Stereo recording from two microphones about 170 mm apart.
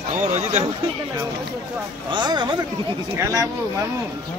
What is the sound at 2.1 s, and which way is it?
Speech, 25° right (ahead or behind).